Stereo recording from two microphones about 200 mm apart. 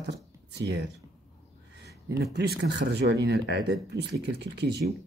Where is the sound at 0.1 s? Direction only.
60° right (ahead or behind).